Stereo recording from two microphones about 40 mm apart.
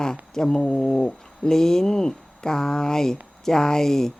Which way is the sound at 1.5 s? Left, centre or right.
Centre.